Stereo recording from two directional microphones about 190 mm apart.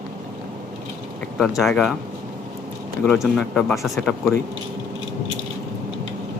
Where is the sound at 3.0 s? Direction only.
Centre (ahead or behind).